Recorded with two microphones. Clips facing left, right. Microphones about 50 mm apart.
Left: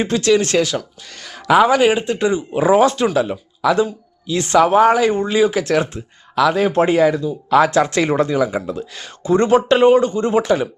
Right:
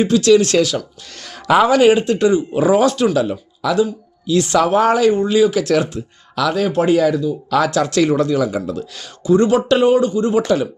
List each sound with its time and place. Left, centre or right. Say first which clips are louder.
0.0 s speech: right 4 dB; left
1.6 s speech: right 2 dB; centre
5.1 s speech: right 2 dB; left
10.4 s speech: even; left